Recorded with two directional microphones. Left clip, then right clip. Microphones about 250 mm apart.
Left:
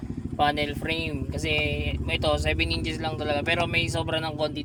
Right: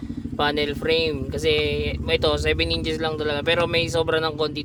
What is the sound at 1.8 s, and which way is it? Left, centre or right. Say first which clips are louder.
Speech: right 6 dB; centre.